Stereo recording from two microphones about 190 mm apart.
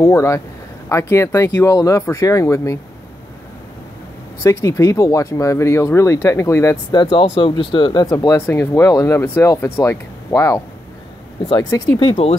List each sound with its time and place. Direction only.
0.0 s speech: 15° left (ahead or behind)
4.4 s speech: 15° left (ahead or behind)